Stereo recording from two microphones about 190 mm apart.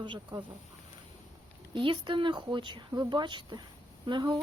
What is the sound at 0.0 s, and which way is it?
Speech, 25° right (ahead or behind).